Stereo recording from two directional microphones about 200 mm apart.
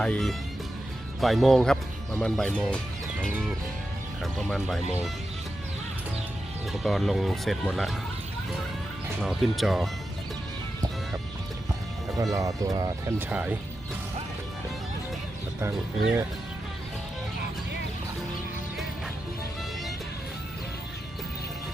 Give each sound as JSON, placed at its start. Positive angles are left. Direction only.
{"t": 0.0, "sound": "speech", "side_deg": 0}
{"t": 4.2, "sound": "speech", "side_deg": 0}
{"t": 6.8, "sound": "speech", "side_deg": 0}
{"t": 9.2, "sound": "speech", "side_deg": 0}
{"t": 12.2, "sound": "speech", "side_deg": -15}